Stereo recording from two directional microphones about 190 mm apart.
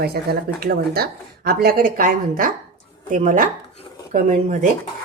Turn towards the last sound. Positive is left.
turn(degrees=-40)  # may be behind; listen again after turning